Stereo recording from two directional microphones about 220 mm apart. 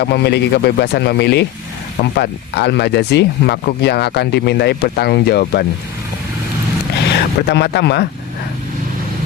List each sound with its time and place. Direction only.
0.0 s speech: 50° left (ahead or behind)
7.4 s speech: 50° left (ahead or behind)